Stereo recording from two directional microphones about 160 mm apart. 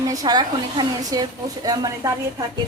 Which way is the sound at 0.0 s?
25° right (ahead or behind).